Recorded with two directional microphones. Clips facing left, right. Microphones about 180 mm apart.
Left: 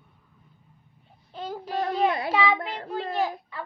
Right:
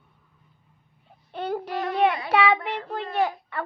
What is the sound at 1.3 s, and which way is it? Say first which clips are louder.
Child singing: right 5 dB; 65° right (ahead or behind).